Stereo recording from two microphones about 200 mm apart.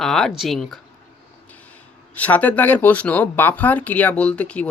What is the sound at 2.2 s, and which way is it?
Speech, 10° left (ahead or behind).